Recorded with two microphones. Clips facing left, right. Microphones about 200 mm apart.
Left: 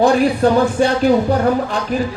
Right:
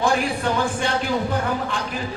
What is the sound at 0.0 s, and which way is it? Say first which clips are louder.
A man's voice: left 9 dB; 35° left (ahead or behind).